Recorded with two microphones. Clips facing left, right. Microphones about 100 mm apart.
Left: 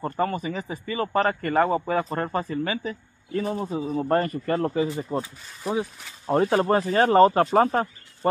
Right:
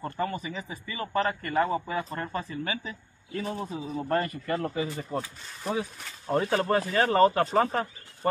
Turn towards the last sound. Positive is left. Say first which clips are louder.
# left 5 dB
turn(degrees=35)  # may be behind; listen again after turning